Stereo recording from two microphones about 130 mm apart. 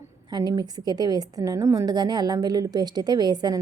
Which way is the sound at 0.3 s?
30° right (ahead or behind).